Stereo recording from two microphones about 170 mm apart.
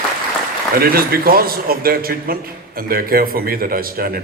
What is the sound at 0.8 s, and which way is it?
A man's voice, 60° right (ahead or behind).